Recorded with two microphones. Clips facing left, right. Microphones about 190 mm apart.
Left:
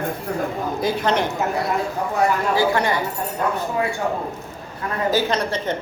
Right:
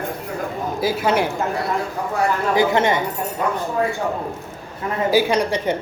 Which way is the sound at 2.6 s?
20° right (ahead or behind).